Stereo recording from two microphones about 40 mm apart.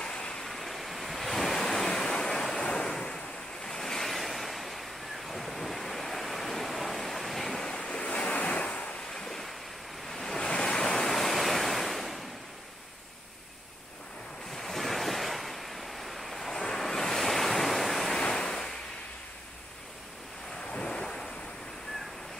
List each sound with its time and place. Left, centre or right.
0.0 s a sound: left
0.4 s waves: centre
7.6 s waves: centre
9.1 s waves: centre
14.5 s waves: centre
18.1 s waves: centre
20.7 s waves: left